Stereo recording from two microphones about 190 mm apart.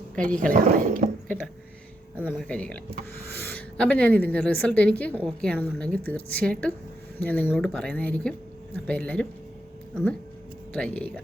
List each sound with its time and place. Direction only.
0.5 s speech: 45° right (ahead or behind)
2.2 s a woman's voice: 5° left (ahead or behind)